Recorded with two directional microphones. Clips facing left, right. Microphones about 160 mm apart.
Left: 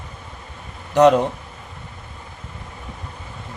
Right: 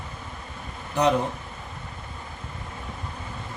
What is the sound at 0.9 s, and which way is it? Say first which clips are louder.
Speech: left 9 dB; 85° left.